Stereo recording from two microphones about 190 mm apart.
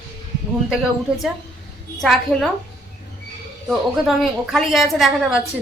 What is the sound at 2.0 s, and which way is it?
Speech, centre (ahead or behind).